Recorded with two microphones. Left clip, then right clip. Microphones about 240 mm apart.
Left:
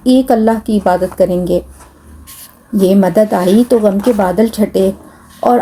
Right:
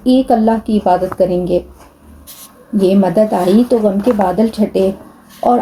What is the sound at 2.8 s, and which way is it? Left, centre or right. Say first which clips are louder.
Speech: left 1 dB; left.